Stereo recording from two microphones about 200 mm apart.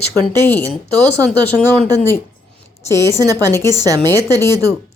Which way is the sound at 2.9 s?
15° right (ahead or behind).